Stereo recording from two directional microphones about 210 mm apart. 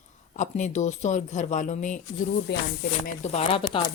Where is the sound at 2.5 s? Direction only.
55° left (ahead or behind).